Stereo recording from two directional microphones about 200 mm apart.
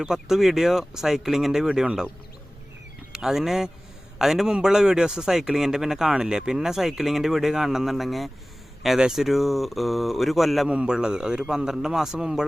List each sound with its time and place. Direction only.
0.0 s a man's voice: 5° right (ahead or behind)
3.1 s a man's voice: 5° right (ahead or behind)